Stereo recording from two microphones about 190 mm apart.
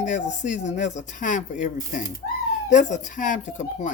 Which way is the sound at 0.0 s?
40° left (ahead or behind).